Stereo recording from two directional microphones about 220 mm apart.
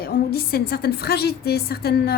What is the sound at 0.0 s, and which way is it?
A woman's voice, 45° left (ahead or behind).